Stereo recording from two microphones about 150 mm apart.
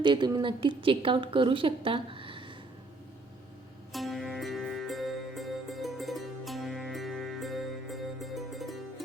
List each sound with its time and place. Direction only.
0.0 s a woman's voice: 30° right (ahead or behind)
3.9 s music: centre (ahead or behind)